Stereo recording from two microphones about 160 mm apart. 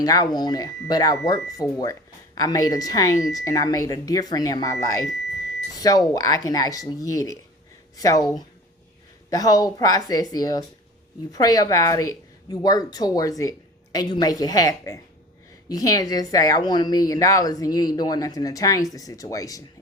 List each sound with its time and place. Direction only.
0.0 s a woman's voice: 25° left (ahead or behind)
9.3 s a woman's voice: 25° left (ahead or behind)